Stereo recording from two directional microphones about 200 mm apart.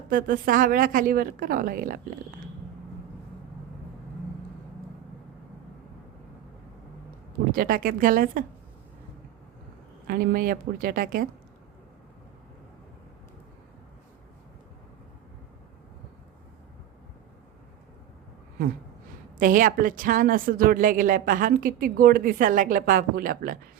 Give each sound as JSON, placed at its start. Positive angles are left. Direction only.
{"t": 0.1, "sound": "a woman's voice", "side_deg": -45}
{"t": 7.5, "sound": "a woman's voice", "side_deg": -45}
{"t": 10.1, "sound": "a woman's voice", "side_deg": -45}
{"t": 19.4, "sound": "a woman's voice", "side_deg": -40}